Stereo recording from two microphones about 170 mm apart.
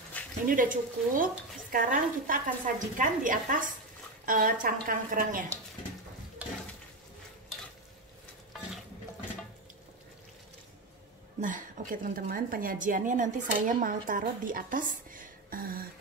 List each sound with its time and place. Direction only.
0.2 s a sound: 10° left (ahead or behind)
0.5 s a woman's voice: 50° right (ahead or behind)
11.4 s a woman's voice: 50° right (ahead or behind)